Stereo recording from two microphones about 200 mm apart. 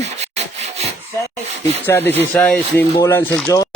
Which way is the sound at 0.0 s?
35° right (ahead or behind).